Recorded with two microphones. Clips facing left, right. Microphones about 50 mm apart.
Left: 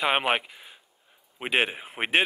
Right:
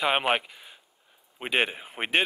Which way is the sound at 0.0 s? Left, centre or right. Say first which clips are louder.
Even; centre.